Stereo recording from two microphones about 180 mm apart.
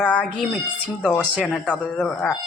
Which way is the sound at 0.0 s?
5° left (ahead or behind).